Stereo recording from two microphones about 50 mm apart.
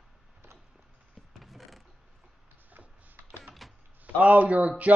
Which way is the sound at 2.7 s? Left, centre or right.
Right.